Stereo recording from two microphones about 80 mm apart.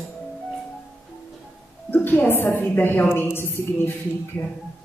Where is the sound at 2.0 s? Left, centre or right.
Left.